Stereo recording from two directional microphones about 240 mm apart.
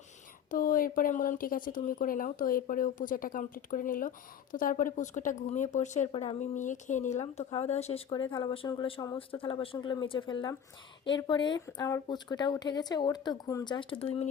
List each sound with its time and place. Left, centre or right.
0.5 s speech: left